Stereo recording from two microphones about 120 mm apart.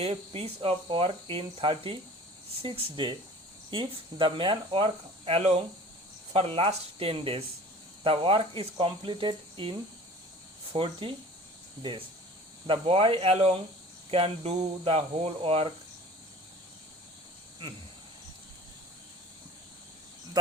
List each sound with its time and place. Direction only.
0.0 s speech: 55° right (ahead or behind)
20.4 s speech: 35° right (ahead or behind)